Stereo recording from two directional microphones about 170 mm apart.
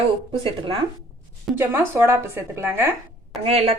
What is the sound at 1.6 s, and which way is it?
A woman's voice, 15° right (ahead or behind).